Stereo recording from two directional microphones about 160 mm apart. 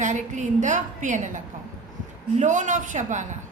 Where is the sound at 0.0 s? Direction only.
50° right (ahead or behind).